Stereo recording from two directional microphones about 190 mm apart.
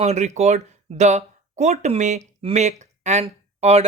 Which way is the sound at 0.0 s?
35° right (ahead or behind).